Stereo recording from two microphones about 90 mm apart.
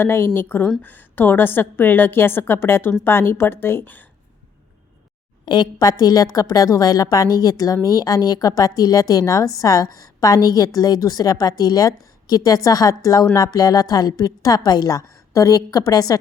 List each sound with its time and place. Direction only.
0.0 s a woman's voice: 25° left (ahead or behind)
5.5 s a woman's voice: 50° left (ahead or behind)